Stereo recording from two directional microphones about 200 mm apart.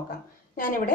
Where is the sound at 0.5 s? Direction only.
45° left (ahead or behind).